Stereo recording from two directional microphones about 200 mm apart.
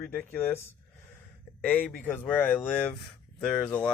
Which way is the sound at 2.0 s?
10° left (ahead or behind).